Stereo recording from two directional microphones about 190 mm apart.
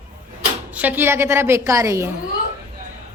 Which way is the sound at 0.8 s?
10° right (ahead or behind).